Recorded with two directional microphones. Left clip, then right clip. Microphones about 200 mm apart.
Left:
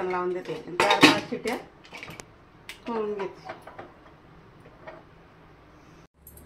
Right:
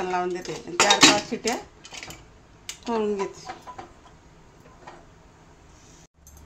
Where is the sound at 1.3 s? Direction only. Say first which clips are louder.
Right 2 dB; 35° right (ahead or behind).